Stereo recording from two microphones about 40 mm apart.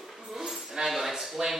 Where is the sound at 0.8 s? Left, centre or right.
Centre.